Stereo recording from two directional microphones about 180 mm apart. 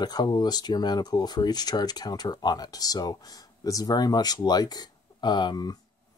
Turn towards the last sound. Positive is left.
turn(degrees=25)  # may be behind; listen again after turning